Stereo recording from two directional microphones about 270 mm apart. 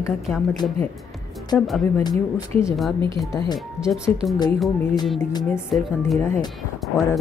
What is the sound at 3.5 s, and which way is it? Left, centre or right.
Speech, centre.